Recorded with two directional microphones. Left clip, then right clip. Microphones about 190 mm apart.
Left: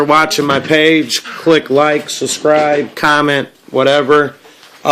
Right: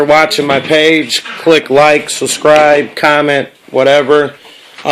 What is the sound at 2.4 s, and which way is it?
Speech, 10° right (ahead or behind).